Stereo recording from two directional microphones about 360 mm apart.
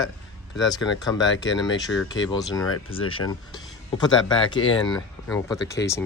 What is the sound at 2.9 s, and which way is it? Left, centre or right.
Speech, centre.